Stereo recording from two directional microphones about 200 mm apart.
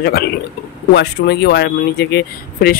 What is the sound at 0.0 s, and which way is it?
Speech, 50° left (ahead or behind).